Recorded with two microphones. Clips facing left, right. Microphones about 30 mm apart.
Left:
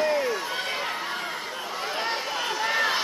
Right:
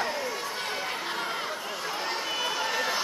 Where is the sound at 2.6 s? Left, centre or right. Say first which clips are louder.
Left 4 dB; left.